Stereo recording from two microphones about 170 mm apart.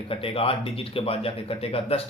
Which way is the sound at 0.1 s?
35° left (ahead or behind).